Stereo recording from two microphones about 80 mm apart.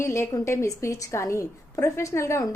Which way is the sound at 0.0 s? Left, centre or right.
Left.